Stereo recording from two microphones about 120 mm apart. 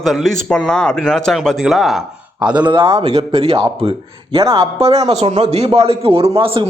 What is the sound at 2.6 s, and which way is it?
A man's voice, 40° right (ahead or behind).